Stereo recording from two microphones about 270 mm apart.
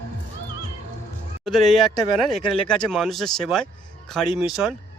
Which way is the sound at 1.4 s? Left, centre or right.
Centre.